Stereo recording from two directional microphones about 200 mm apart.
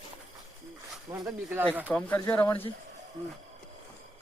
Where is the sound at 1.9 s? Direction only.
10° left (ahead or behind).